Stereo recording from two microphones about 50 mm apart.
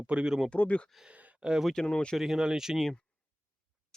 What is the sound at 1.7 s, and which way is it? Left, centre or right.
Speech, centre.